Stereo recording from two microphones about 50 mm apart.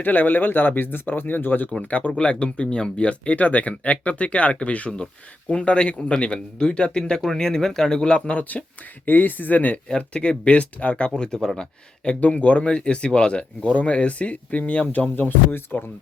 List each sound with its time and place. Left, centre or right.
0.0 s speech: left
1.9 s speech: left
10.0 s speech: left
11.2 s speech: centre
12.2 s speech: left
15.1 s speech: left